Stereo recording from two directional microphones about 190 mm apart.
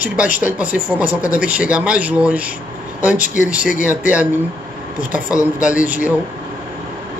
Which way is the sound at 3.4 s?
5° right (ahead or behind).